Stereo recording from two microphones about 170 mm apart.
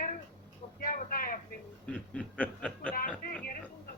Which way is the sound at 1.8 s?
5° left (ahead or behind).